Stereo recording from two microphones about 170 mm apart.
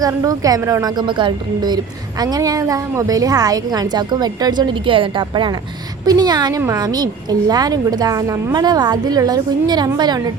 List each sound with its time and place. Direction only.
0.0 s a woman's voice: 20° right (ahead or behind)